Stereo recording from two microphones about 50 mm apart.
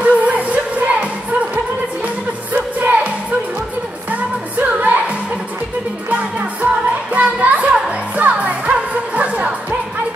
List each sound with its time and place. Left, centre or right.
0.0 s music: right
2.5 s music: right
4.6 s music: right
6.6 s music: right